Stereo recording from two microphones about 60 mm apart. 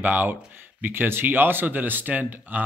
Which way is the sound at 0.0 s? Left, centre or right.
Right.